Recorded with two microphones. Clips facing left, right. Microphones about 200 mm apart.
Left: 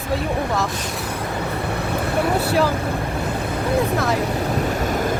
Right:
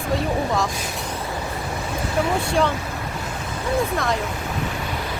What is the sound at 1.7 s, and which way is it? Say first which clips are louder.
Vehicle: left 4 dB; 65° left (ahead or behind).